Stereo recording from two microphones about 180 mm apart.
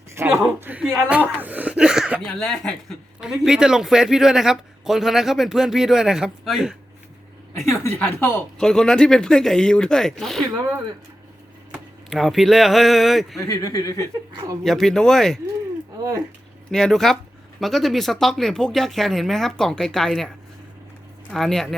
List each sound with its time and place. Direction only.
0.2 s a man's voice: 10° right (ahead or behind)
7.5 s a man's voice: 15° left (ahead or behind)
11.7 s speech: centre (ahead or behind)
13.4 s speech: 20° left (ahead or behind)
14.6 s a man's voice: centre (ahead or behind)
16.7 s a man's voice: centre (ahead or behind)